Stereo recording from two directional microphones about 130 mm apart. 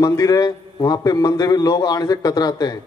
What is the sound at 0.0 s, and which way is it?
A man's voice, 30° left (ahead or behind).